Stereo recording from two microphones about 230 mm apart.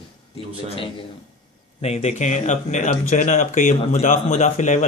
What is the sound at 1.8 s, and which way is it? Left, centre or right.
Speech, left.